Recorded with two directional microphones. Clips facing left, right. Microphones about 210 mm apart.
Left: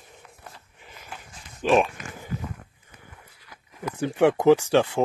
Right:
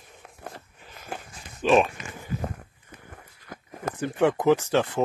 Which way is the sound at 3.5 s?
50° right (ahead or behind).